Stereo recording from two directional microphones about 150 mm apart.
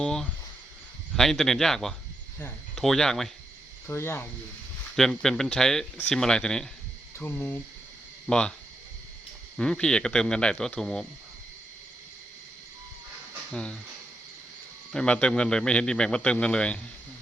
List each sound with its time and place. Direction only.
0.0 s a sound: 5° left (ahead or behind)
1.1 s speech: centre (ahead or behind)
3.8 s a man's voice: 15° left (ahead or behind)
4.9 s a man's voice: centre (ahead or behind)
9.6 s speech: 5° left (ahead or behind)
13.5 s speech: 5° left (ahead or behind)
14.9 s a man's voice: 5° left (ahead or behind)